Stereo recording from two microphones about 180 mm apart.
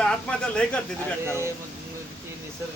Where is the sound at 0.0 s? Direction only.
5° left (ahead or behind).